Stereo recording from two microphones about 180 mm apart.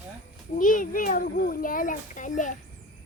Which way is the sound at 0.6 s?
50° left (ahead or behind).